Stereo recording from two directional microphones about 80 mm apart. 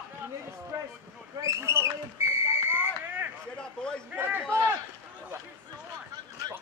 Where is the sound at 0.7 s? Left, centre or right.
Right.